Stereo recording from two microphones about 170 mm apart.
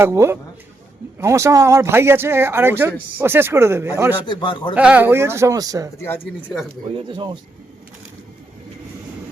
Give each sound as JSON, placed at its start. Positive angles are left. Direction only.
{"t": 0.0, "sound": "speech", "side_deg": -15}
{"t": 4.3, "sound": "speech", "side_deg": 25}
{"t": 4.7, "sound": "speech", "side_deg": -5}
{"t": 6.0, "sound": "speech", "side_deg": 10}
{"t": 6.8, "sound": "speech", "side_deg": -30}